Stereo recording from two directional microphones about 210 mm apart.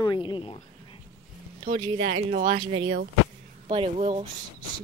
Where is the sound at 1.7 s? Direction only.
45° right (ahead or behind).